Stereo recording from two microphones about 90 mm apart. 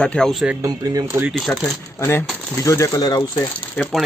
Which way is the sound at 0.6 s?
40° right (ahead or behind).